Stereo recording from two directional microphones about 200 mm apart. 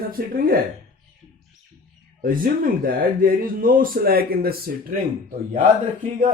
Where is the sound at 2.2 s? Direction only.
45° right (ahead or behind).